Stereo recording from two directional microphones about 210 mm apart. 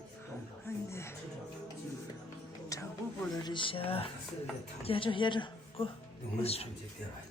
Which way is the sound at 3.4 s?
20° left (ahead or behind).